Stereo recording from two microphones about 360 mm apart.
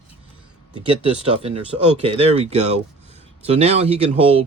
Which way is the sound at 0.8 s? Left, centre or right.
Centre.